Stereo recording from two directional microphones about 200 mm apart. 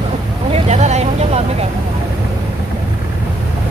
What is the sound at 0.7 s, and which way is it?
Vehicle, 35° right (ahead or behind).